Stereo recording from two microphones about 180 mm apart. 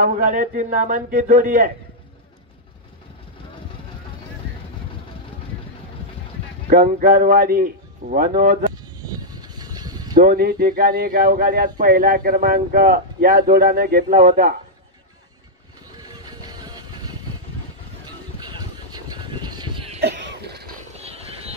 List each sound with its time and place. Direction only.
0.0 s speech: 45° right (ahead or behind)
6.7 s a man's voice: 55° right (ahead or behind)
9.0 s vehicle: 20° right (ahead or behind)
10.1 s a man's voice: 55° right (ahead or behind)
16.0 s music: 20° right (ahead or behind)
18.0 s vehicle: 25° right (ahead or behind)
20.0 s cough: 65° right (ahead or behind)
20.9 s vehicle: 35° right (ahead or behind)